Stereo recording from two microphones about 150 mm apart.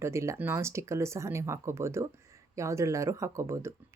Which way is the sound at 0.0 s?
20° right (ahead or behind).